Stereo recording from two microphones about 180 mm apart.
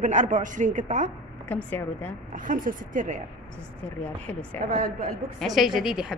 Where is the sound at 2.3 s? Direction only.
50° right (ahead or behind).